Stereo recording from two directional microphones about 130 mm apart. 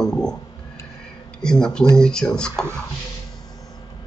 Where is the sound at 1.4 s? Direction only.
5° left (ahead or behind).